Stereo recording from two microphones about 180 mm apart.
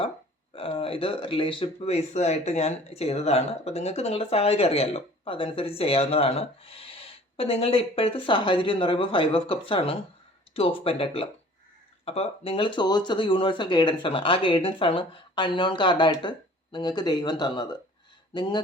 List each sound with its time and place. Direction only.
0.5 s speech: 30° left (ahead or behind)